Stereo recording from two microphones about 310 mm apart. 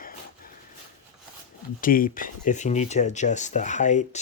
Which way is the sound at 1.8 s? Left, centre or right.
Left.